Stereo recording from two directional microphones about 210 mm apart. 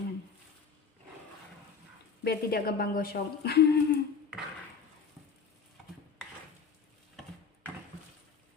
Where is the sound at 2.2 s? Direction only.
50° left (ahead or behind).